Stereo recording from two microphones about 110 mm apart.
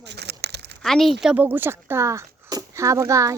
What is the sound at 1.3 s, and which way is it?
Speech, 20° right (ahead or behind).